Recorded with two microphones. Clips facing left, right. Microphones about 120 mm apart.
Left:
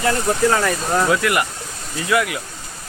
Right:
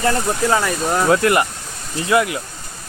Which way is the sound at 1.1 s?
30° right (ahead or behind).